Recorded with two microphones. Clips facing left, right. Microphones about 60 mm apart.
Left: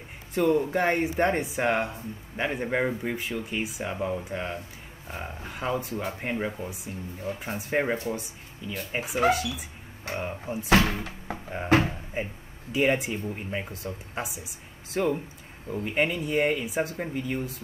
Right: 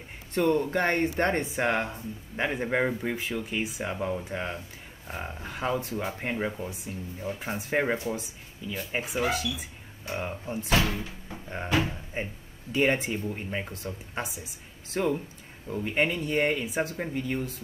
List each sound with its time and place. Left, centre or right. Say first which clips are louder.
0.3 s speech: left 1 dB; centre
10.7 s speech: left 4 dB; left
11.4 s speech: left 4 dB; centre